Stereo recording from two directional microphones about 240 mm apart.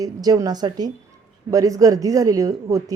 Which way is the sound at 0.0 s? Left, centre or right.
Centre.